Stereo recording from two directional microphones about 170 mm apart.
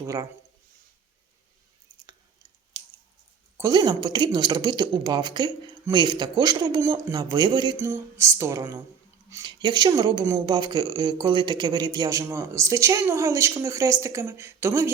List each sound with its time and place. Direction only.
0.0 s speech: 20° right (ahead or behind)
3.6 s speech: 25° right (ahead or behind)